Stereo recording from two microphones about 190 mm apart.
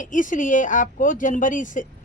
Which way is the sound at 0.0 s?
45° left (ahead or behind).